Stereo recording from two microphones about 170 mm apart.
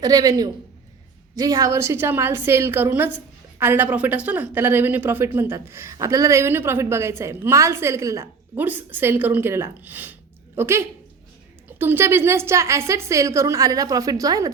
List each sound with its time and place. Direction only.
0.0 s a man's voice: 20° right (ahead or behind)